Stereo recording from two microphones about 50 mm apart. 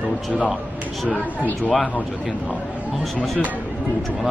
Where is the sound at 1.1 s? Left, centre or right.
Left.